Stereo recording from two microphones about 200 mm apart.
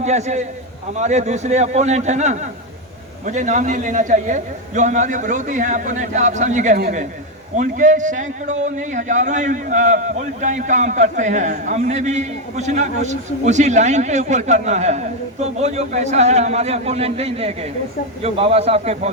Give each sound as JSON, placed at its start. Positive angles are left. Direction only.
{"t": 0.0, "sound": "a man's voice", "side_deg": -35}